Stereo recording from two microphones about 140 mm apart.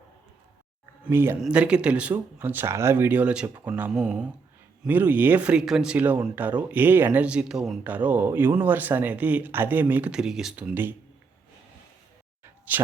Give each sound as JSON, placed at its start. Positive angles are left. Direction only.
{"t": 1.0, "sound": "speech", "side_deg": -15}
{"t": 12.7, "sound": "speech", "side_deg": -10}